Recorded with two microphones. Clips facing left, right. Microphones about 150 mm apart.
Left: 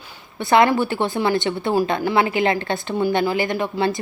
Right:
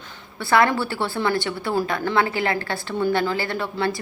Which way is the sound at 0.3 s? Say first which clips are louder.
Left 3 dB; 20° left (ahead or behind).